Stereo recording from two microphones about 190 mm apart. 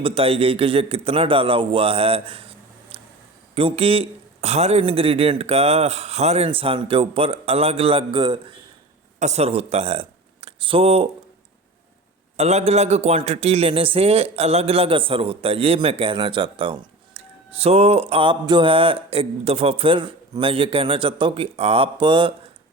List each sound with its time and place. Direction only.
0.0 s a man's voice: 30° right (ahead or behind)
2.9 s a sound: 30° right (ahead or behind)
3.5 s a man's voice: 30° right (ahead or behind)
9.1 s speech: 35° right (ahead or behind)
12.4 s a man's voice: 35° right (ahead or behind)